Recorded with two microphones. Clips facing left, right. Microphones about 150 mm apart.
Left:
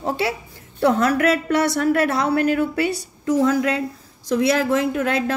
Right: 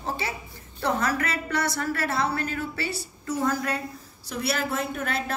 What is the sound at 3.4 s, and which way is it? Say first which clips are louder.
A woman's voice: left 8 dB; 85° left.